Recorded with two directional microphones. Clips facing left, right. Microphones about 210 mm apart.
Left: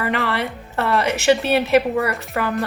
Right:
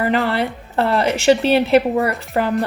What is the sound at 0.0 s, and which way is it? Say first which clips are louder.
A woman's voice: right 4 dB; 30° right (ahead or behind).